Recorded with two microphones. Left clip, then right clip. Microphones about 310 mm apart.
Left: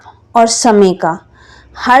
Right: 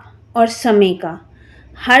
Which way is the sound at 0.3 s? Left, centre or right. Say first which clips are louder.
Left 5 dB; left.